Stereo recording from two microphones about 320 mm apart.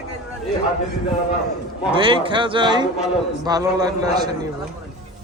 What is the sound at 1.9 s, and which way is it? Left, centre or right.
Speech, centre.